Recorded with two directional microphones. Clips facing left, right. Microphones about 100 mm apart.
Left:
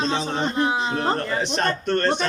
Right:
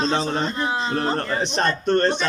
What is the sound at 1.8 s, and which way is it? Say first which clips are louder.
Speech: right 7 dB; 20° right (ahead or behind).